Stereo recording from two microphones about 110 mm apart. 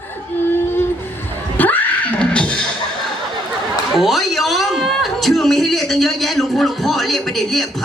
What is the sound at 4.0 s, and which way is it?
A man's voice, centre (ahead or behind).